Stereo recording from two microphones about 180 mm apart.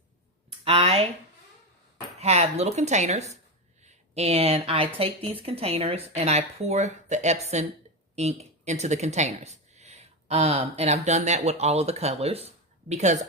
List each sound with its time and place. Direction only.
0.6 s speech: 35° right (ahead or behind)
2.1 s speech: 35° right (ahead or behind)